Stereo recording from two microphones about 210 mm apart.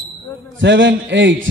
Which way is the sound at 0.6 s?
60° right (ahead or behind).